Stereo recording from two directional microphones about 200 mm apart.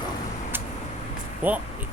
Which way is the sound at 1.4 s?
10° right (ahead or behind).